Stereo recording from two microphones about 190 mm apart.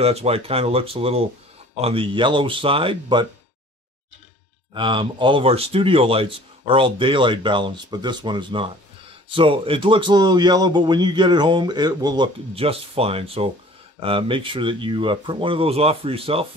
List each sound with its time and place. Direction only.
0.0 s a man's voice: 35° right (ahead or behind)
4.7 s a man's voice: 25° right (ahead or behind)